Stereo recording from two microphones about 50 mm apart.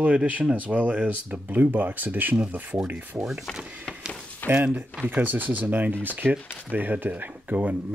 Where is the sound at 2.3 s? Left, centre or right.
Right.